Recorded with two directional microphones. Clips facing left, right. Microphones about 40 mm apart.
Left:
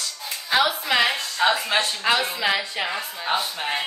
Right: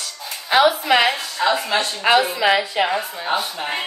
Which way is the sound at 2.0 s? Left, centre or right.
Right.